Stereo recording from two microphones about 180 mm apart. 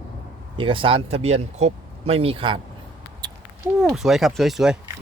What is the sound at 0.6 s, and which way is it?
Speech, 30° right (ahead or behind).